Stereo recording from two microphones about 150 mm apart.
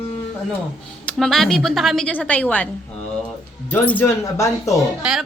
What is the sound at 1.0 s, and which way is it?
A woman's voice, centre (ahead or behind).